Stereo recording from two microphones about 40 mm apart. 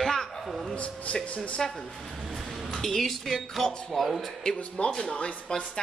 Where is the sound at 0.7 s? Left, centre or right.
Left.